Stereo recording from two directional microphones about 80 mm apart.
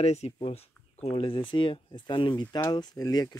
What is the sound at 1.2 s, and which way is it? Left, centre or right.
Speech, left.